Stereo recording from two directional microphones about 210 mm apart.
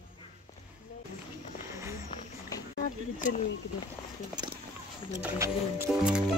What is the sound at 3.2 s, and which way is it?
Speech, 40° left (ahead or behind).